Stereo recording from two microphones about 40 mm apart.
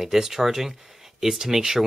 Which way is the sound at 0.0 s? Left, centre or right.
Centre.